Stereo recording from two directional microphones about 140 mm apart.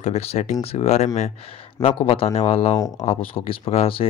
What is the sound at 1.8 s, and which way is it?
Speech, 40° left (ahead or behind).